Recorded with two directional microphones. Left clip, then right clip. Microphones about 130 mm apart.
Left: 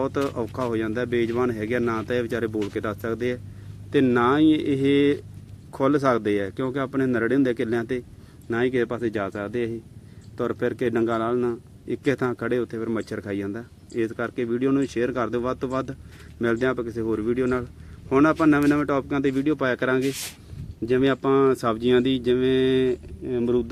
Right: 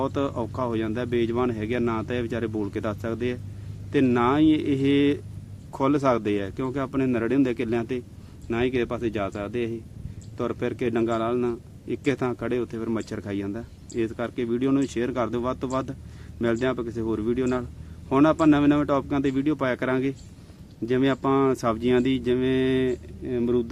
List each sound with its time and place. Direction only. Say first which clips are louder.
0.0 s a man's voice: left 1 dB; 20° left (ahead or behind)
3.9 s a man's voice: left 2 dB; 25° left (ahead or behind)